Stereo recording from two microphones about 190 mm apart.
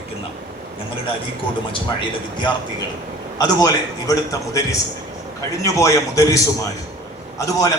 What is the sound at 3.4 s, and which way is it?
A man's voice, 20° left (ahead or behind).